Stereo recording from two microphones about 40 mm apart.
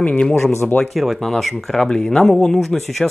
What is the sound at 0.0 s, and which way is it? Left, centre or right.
Speech, left.